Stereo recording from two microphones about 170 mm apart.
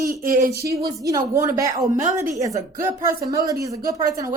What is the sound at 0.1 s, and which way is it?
Speech, 60° right (ahead or behind).